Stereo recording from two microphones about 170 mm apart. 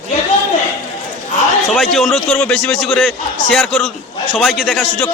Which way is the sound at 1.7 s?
Centre (ahead or behind).